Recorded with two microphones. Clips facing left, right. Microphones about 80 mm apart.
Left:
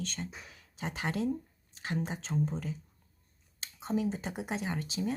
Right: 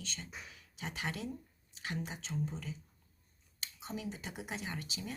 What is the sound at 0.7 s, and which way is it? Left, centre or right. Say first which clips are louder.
Speech: left 6 dB; left.